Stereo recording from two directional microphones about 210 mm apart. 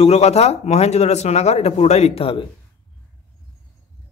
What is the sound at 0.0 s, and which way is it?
Speech, 30° left (ahead or behind).